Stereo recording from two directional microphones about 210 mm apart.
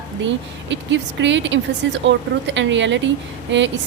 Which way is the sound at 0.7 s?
60° right (ahead or behind).